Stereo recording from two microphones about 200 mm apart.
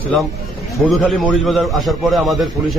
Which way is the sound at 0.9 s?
Centre (ahead or behind).